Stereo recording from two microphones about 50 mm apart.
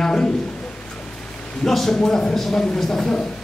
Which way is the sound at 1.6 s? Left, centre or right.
Centre.